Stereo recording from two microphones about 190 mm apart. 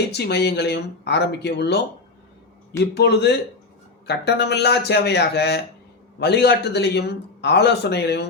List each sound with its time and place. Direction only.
0.1 s a man's voice: 60° left (ahead or behind)
2.9 s a man's voice: 65° left (ahead or behind)